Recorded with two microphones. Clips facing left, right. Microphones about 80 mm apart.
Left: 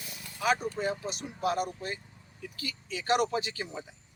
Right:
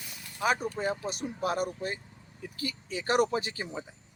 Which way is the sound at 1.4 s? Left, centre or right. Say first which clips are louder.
Left 1 dB; right.